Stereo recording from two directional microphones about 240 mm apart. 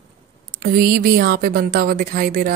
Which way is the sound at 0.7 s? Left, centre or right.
Right.